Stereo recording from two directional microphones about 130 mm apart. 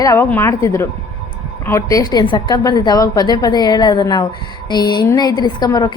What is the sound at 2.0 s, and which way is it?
A woman's voice, 35° left (ahead or behind).